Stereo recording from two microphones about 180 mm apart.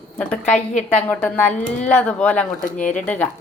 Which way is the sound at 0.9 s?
10° left (ahead or behind).